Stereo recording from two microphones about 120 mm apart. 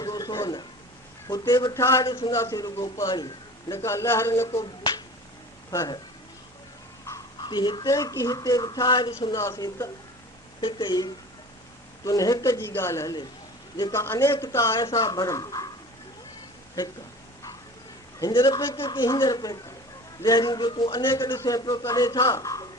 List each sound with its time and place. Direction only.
0.0 s a sound: 30° left (ahead or behind)
1.3 s speech: 30° left (ahead or behind)
7.4 s speech: 40° left (ahead or behind)
10.6 s speech: 40° left (ahead or behind); by 14.8 s 25° left (ahead or behind)
14.8 s speech: 35° left (ahead or behind)
18.2 s speech: 35° left (ahead or behind)